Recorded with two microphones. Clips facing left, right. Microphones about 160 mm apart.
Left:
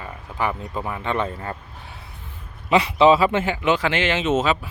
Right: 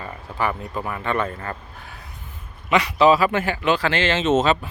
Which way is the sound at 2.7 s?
30° left (ahead or behind).